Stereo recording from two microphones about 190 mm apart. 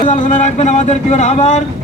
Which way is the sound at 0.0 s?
40° left (ahead or behind).